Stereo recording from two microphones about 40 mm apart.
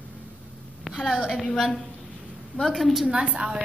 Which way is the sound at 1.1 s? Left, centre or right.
Centre.